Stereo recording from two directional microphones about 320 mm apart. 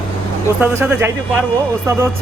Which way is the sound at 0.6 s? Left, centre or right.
Centre.